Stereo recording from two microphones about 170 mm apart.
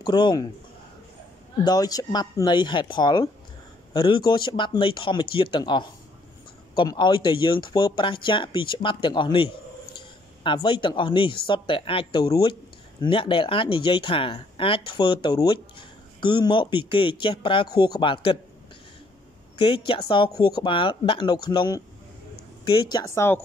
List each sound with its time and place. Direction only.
0.0 s speech: 25° left (ahead or behind)
1.6 s speech: 20° left (ahead or behind)
19.5 s speech: 30° left (ahead or behind); by 23.4 s 15° left (ahead or behind)